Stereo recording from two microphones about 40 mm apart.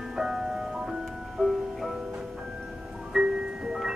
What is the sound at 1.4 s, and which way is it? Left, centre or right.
Music, centre.